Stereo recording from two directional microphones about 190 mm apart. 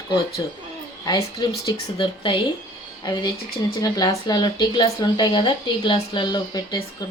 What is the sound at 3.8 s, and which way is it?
Speech, 20° left (ahead or behind).